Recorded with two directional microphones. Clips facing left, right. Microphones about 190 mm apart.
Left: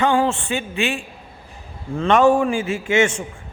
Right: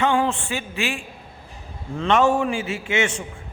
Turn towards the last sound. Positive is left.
turn(degrees=50)  # may be behind; listen again after turning